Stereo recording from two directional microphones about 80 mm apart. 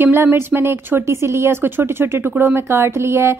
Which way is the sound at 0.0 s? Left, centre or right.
Right.